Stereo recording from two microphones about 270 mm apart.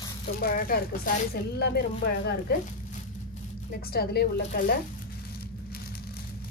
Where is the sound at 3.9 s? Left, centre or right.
Left.